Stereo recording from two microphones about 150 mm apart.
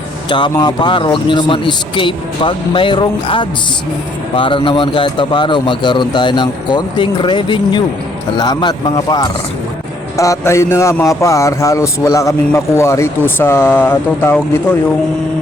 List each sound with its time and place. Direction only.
0.3 s speech: 30° left (ahead or behind); by 14.8 s 15° left (ahead or behind)